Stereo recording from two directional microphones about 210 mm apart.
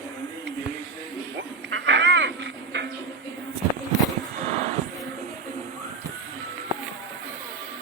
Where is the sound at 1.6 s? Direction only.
60° right (ahead or behind).